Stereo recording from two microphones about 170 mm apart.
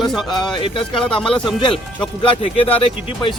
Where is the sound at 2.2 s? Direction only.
35° left (ahead or behind).